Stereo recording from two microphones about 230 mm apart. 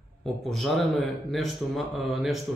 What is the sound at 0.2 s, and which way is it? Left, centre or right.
A man's voice, centre.